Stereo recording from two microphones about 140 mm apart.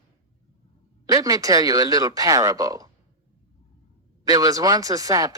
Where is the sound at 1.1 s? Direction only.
25° right (ahead or behind).